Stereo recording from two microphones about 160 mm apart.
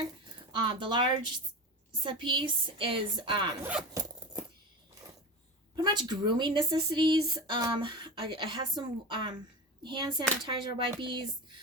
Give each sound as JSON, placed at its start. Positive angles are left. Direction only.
{"t": 0.5, "sound": "a woman's voice", "side_deg": -30}
{"t": 2.0, "sound": "a woman's voice", "side_deg": -30}
{"t": 3.6, "sound": "speech", "side_deg": -5}
{"t": 5.7, "sound": "a woman's voice", "side_deg": -25}